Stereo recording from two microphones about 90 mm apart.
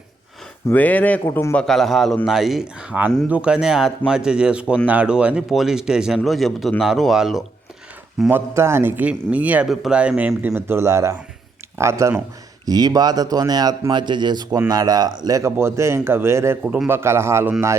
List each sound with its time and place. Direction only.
0.7 s speech: 20° left (ahead or behind)
1.2 s a man's voice: 30° left (ahead or behind)
1.5 s speech: 5° left (ahead or behind)
8.3 s a man's voice: 30° right (ahead or behind)
9.6 s speech: 5° right (ahead or behind)
10.0 s a man's voice: 15° right (ahead or behind); by 12.1 s 30° right (ahead or behind)
12.6 s speech: 45° right (ahead or behind); by 16.6 s 30° right (ahead or behind)
16.6 s speech: 10° right (ahead or behind)
16.9 s a man's voice: 30° right (ahead or behind)